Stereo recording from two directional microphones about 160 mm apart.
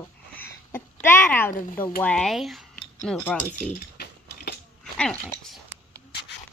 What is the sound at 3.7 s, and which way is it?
Typing, 85° left.